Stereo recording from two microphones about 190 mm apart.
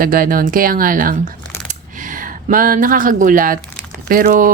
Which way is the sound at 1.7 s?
45° right (ahead or behind).